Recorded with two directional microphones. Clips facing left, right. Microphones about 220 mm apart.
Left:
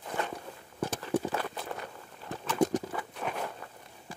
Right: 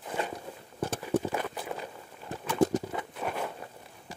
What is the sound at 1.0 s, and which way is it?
Clip-clop, 10° right (ahead or behind).